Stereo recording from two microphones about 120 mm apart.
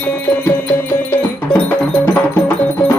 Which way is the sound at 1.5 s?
10° left (ahead or behind).